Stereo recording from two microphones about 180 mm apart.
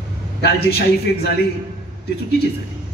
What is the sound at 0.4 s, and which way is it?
Speech, 60° left (ahead or behind).